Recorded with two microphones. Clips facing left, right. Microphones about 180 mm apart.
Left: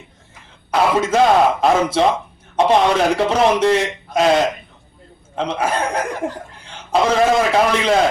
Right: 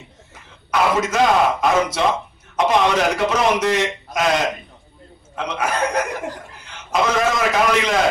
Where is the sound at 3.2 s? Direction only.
30° left (ahead or behind).